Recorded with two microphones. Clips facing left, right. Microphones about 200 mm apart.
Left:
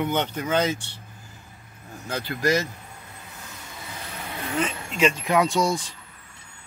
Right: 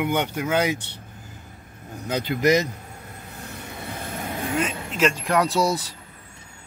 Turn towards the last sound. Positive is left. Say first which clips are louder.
# right 1 dB
turn(degrees=-5)  # may be behind; listen again after turning